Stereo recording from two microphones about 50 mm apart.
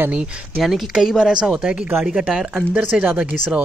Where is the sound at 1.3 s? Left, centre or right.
Centre.